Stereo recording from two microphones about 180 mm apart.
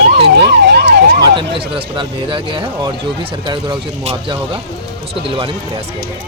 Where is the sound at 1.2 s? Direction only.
25° right (ahead or behind).